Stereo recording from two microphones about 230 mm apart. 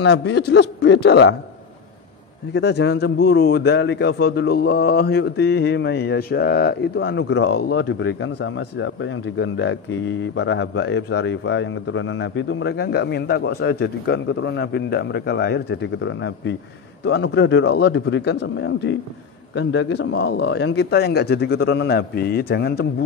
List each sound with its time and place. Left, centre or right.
0.0 s a man's voice: left
2.5 s a man's voice: left